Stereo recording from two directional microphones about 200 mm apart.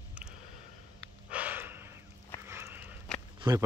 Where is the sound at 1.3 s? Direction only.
10° right (ahead or behind).